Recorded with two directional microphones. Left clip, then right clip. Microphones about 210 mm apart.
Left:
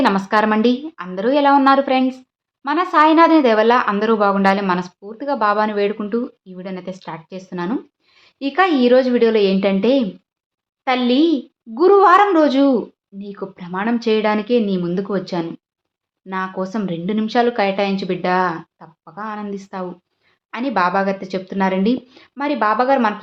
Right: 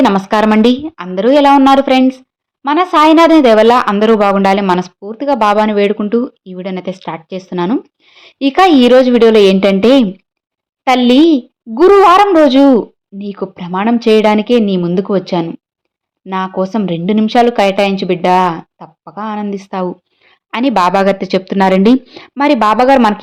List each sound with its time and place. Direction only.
0.0 s speech: 30° right (ahead or behind)